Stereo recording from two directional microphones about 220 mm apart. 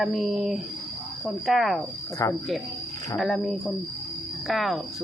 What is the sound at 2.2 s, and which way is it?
Speech, 15° left (ahead or behind).